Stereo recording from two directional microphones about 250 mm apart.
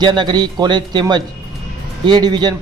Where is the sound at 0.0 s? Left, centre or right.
Centre.